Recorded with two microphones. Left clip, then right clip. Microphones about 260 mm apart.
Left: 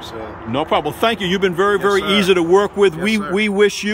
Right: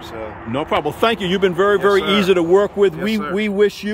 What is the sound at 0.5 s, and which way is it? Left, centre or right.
Speech, centre.